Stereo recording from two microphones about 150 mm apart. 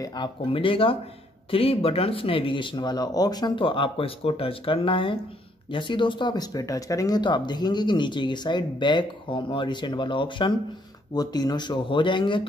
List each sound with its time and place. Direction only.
0.0 s speech: 30° left (ahead or behind)